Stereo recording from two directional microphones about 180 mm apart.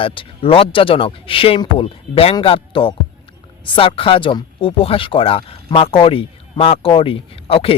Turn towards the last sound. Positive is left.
turn(degrees=30)  # may be behind; listen again after turning